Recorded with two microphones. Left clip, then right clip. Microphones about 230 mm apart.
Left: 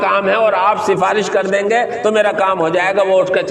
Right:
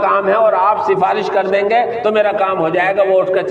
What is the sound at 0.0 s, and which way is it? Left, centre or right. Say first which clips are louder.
A man's voice: right 1 dB; left.